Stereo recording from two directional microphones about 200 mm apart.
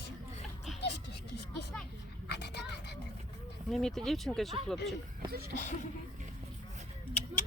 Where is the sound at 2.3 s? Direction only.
55° left (ahead or behind).